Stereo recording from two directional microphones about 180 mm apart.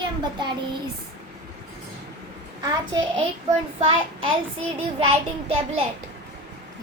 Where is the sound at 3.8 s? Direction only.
30° right (ahead or behind).